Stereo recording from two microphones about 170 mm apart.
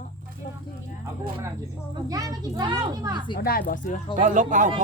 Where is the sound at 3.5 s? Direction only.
60° left (ahead or behind).